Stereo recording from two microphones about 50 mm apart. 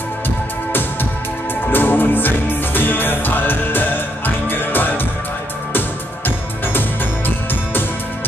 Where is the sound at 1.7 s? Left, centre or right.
Left.